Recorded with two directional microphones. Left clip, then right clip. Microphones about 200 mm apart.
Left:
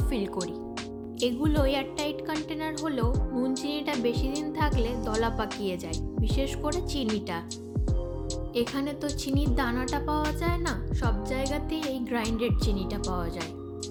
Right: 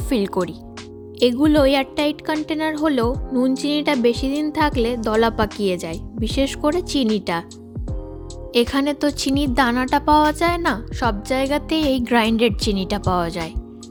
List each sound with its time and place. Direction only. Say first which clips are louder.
0.1 s speech: right 11 dB; 40° right (ahead or behind)
8.7 s speech: right 11 dB; 50° right (ahead or behind)